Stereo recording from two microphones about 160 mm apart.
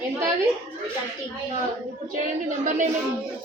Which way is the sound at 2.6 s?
50° right (ahead or behind).